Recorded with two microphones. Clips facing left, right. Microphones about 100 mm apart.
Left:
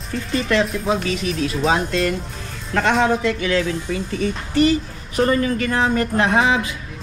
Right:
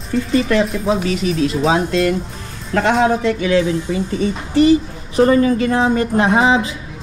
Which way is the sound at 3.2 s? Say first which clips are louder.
Right 4 dB; 25° right (ahead or behind).